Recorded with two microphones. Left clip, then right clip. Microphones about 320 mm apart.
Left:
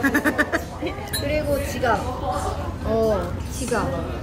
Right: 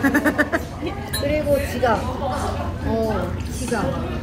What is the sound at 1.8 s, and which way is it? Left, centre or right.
Music, centre.